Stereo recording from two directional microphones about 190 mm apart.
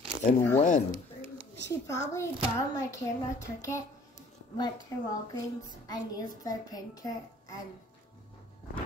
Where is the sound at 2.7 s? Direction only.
15° left (ahead or behind).